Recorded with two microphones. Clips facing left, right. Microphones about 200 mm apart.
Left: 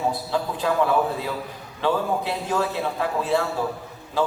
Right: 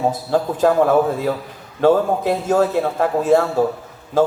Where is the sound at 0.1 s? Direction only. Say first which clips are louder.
Right 6 dB; 45° right (ahead or behind).